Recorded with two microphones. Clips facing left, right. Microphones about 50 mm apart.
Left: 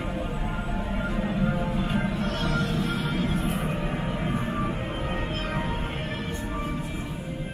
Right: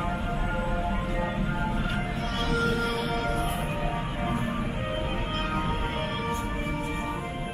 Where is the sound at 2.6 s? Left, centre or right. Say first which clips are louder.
Right 1 dB; right.